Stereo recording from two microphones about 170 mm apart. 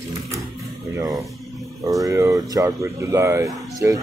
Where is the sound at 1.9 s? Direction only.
20° right (ahead or behind).